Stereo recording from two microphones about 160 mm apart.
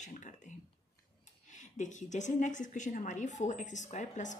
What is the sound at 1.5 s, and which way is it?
A woman's voice, 50° left (ahead or behind).